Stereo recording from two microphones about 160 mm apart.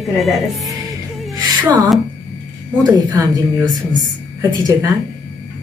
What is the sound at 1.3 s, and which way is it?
Music, 25° right (ahead or behind).